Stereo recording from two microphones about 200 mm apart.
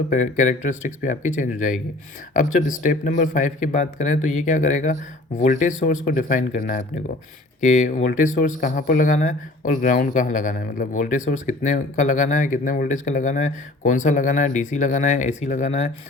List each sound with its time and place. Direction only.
0.1 s speech: 40° left (ahead or behind)